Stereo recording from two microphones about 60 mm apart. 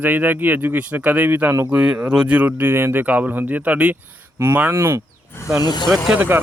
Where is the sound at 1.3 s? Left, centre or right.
Right.